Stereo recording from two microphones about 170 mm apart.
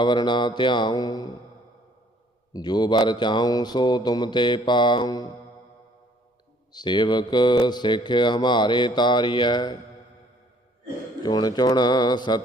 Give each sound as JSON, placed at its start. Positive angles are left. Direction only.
{"t": 0.0, "sound": "speech", "side_deg": 25}
{"t": 2.5, "sound": "speech", "side_deg": 25}
{"t": 6.7, "sound": "speech", "side_deg": 25}
{"t": 11.2, "sound": "speech", "side_deg": 25}